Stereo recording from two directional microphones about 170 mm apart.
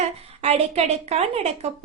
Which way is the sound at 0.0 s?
40° right (ahead or behind).